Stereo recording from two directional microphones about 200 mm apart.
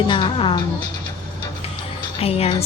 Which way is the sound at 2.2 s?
30° left (ahead or behind).